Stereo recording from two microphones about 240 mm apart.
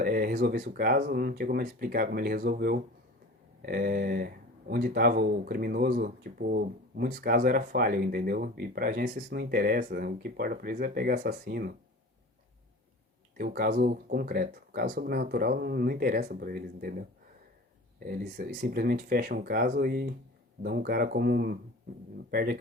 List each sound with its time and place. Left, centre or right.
0.0 s speech: right
13.3 s speech: right
18.0 s speech: right